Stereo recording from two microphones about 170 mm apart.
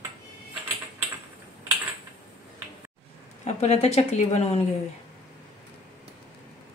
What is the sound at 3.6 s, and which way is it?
A woman's voice, 40° left (ahead or behind).